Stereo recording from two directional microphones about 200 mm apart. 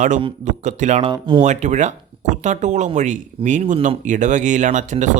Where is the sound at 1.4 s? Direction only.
35° right (ahead or behind).